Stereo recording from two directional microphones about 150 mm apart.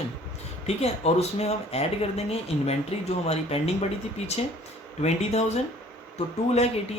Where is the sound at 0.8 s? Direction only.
45° left (ahead or behind).